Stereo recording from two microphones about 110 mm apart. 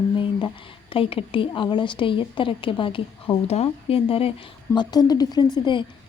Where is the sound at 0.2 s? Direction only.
50° left (ahead or behind).